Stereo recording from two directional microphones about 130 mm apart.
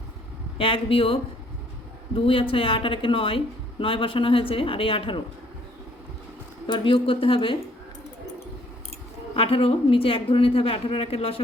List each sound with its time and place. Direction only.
0.6 s speech: 45° left (ahead or behind)
6.7 s speech: 40° left (ahead or behind)
9.3 s speech: 45° left (ahead or behind)